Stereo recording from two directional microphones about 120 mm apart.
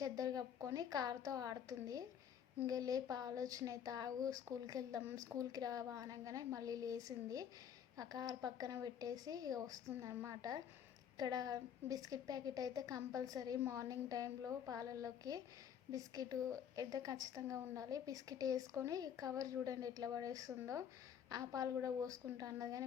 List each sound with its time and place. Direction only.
0.0 s a woman's voice: 30° right (ahead or behind)